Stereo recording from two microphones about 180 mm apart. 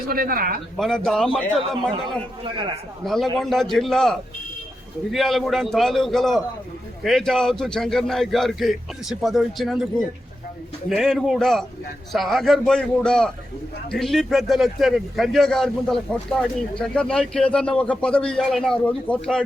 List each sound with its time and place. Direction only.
0.1 s speech: 55° right (ahead or behind)
0.8 s speech: centre (ahead or behind)
2.4 s speech: 25° right (ahead or behind)
3.0 s speech: centre (ahead or behind)